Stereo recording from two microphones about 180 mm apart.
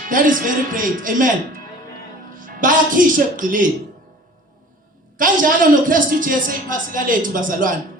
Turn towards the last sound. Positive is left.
turn(degrees=-50)  # may be behind; listen again after turning